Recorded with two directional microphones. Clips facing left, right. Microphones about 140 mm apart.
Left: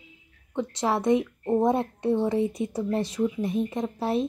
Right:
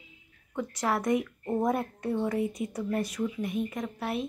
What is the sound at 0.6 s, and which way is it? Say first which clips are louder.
Speech: left 4 dB; 25° left (ahead or behind).